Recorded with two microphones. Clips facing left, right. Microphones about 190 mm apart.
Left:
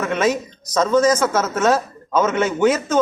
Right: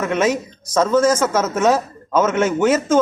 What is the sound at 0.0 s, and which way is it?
Speech, 10° right (ahead or behind).